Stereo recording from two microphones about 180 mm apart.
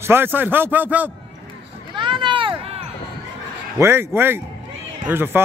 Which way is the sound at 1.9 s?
25° right (ahead or behind).